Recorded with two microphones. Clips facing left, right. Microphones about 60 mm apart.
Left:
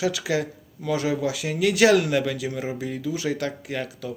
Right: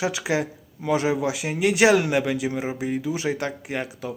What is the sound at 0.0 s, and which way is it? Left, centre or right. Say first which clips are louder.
Speech: even; right.